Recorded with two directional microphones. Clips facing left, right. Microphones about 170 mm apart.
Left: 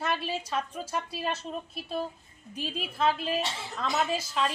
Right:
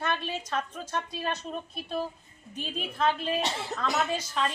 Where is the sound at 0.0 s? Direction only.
5° left (ahead or behind).